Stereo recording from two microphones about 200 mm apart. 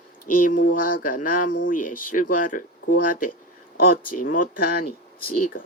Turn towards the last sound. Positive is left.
turn(degrees=45)  # may be behind; listen again after turning